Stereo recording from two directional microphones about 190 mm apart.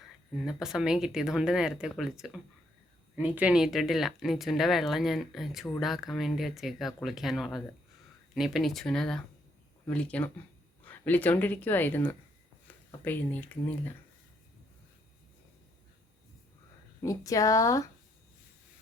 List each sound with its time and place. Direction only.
0.3 s speech: centre (ahead or behind)
17.0 s speech: 15° left (ahead or behind)